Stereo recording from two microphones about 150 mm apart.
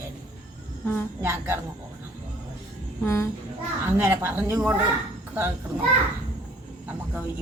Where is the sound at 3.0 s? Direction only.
20° left (ahead or behind).